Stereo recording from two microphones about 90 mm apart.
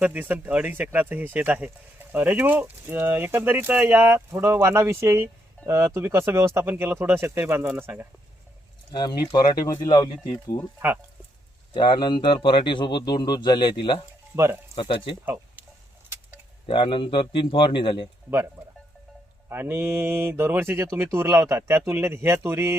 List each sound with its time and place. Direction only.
0.0 s speech: 15° right (ahead or behind)
8.9 s speech: 55° left (ahead or behind)
11.7 s speech: 55° left (ahead or behind)
14.3 s speech: 30° right (ahead or behind)
15.2 s a sound: 20° right (ahead or behind)
16.7 s a man's voice: 70° left (ahead or behind)
18.6 s speech: 40° right (ahead or behind)
19.5 s speech: 25° right (ahead or behind)